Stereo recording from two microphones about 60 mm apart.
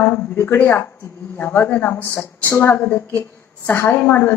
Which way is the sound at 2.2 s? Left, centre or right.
Left.